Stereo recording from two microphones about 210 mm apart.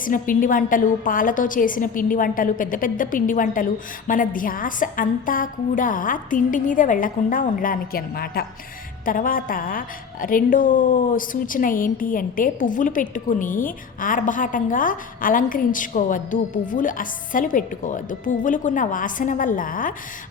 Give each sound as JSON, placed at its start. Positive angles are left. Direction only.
{"t": 0.0, "sound": "a woman's voice", "side_deg": 40}